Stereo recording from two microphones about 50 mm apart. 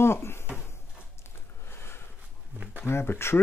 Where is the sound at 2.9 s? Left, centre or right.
Left.